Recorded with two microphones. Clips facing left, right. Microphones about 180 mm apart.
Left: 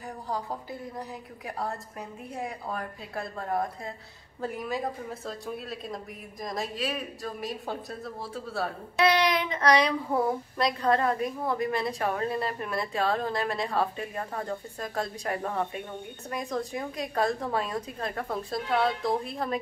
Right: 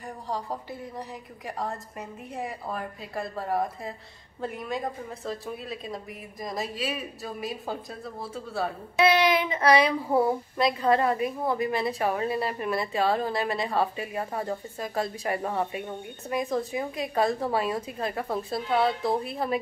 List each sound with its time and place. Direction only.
0.3 s a woman's voice: centre (ahead or behind)
2.3 s a woman's voice: centre (ahead or behind)